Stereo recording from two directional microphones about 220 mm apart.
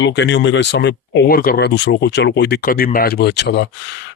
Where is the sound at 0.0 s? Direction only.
55° left (ahead or behind).